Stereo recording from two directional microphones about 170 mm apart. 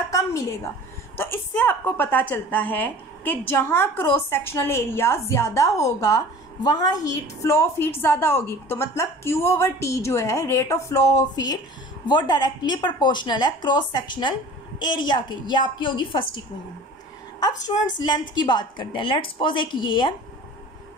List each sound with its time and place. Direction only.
0.1 s a sound: 20° left (ahead or behind)
1.1 s a woman's voice: 15° left (ahead or behind); by 16.3 s 30° left (ahead or behind)
17.4 s speech: 20° left (ahead or behind)